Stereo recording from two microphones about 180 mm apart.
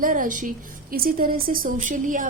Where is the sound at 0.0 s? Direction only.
50° right (ahead or behind).